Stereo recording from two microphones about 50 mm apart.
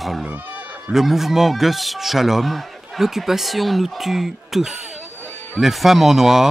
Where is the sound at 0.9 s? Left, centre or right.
Centre.